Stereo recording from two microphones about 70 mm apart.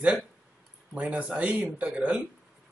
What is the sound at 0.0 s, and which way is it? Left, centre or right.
Speech, centre.